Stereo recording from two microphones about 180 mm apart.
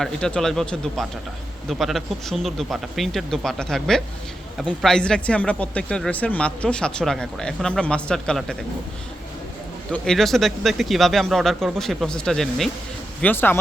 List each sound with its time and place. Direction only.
0.0 s speech: 5° left (ahead or behind)
9.9 s speech: centre (ahead or behind)